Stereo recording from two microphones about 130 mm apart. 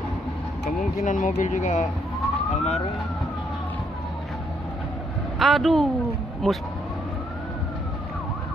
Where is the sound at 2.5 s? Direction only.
55° left (ahead or behind).